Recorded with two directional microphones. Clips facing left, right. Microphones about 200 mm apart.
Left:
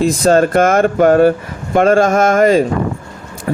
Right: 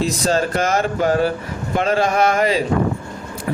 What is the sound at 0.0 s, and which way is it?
Speech, 55° left (ahead or behind).